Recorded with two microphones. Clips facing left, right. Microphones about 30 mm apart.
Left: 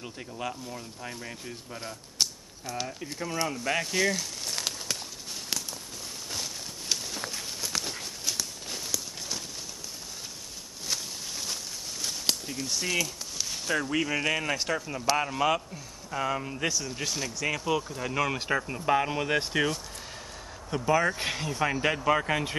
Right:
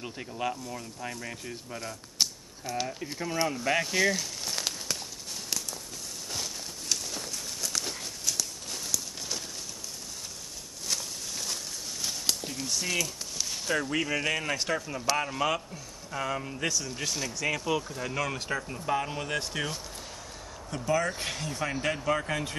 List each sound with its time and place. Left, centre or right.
0.0 s speech: centre
6.9 s a sound: centre
10.9 s walk: centre
12.4 s speech: centre
20.7 s speech: centre